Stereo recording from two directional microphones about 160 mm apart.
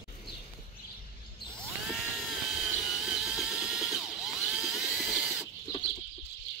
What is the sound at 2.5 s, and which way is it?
Drill, centre (ahead or behind).